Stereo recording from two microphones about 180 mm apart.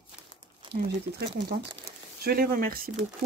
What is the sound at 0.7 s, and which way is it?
Speech, 60° right (ahead or behind).